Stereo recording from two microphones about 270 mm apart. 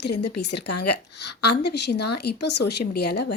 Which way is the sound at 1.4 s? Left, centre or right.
Left.